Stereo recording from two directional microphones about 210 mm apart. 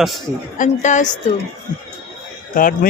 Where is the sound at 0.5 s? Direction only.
35° left (ahead or behind).